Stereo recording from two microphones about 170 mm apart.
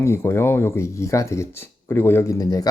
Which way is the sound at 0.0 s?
15° left (ahead or behind).